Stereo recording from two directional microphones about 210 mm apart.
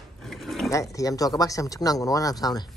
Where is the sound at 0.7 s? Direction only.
15° left (ahead or behind).